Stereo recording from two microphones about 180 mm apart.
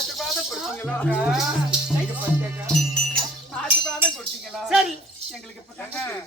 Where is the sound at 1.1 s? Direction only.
5° right (ahead or behind).